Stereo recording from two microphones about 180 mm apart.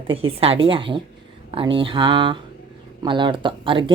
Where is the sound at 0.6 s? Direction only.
30° right (ahead or behind).